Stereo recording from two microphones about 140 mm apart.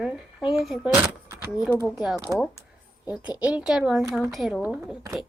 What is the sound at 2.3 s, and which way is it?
Speech, 20° right (ahead or behind).